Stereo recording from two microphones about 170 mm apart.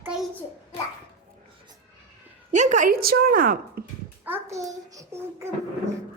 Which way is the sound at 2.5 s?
45° right (ahead or behind).